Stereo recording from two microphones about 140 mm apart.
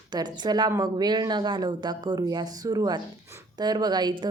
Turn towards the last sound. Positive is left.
turn(degrees=-30)  # may be behind; listen again after turning